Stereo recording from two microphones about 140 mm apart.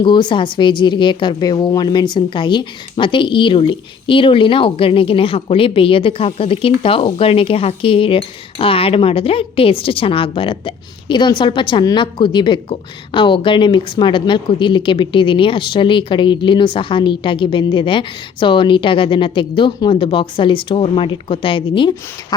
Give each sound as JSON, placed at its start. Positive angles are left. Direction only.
{"t": 0.0, "sound": "a woman's voice", "side_deg": 35}